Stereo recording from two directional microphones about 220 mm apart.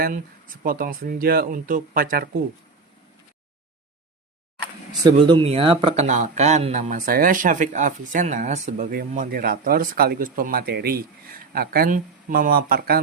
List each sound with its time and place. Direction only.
0.0 s speech: 40° right (ahead or behind)
4.9 s speech: 20° right (ahead or behind); by 13.0 s 45° right (ahead or behind)